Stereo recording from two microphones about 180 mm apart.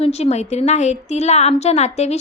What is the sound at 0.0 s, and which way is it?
A woman's voice, 35° left (ahead or behind).